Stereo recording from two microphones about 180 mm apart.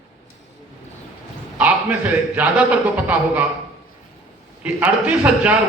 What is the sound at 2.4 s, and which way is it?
A man's voice, 10° right (ahead or behind).